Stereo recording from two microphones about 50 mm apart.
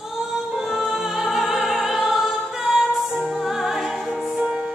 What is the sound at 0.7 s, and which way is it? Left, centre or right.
Music, centre.